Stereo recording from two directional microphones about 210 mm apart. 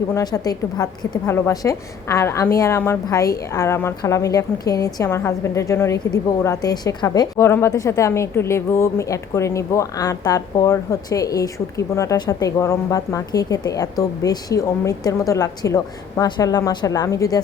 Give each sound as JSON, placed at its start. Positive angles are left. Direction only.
{"t": 0.1, "sound": "a woman's voice", "side_deg": 15}